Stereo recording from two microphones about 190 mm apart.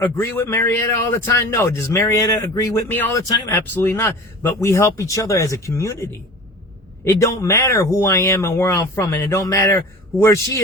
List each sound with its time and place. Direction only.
0.0 s a man's voice: 15° left (ahead or behind)